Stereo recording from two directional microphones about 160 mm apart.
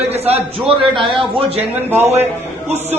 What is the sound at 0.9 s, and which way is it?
Speech, 35° right (ahead or behind).